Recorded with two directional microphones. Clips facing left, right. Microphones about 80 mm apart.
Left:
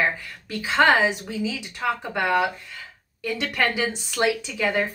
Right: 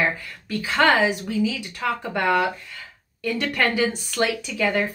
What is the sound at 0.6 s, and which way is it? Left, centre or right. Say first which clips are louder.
Speech: even; centre.